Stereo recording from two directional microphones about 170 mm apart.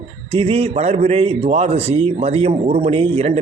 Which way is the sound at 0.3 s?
35° right (ahead or behind).